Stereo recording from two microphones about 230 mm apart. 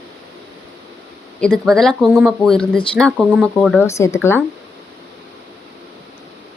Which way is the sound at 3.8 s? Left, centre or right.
Centre.